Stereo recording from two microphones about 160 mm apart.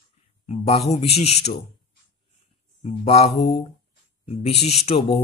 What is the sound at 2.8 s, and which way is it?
Speech, 40° left (ahead or behind).